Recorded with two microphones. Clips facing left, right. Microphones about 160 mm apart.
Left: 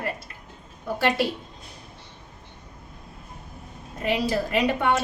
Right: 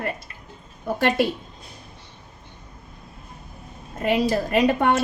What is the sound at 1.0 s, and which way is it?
Speech, 50° right (ahead or behind).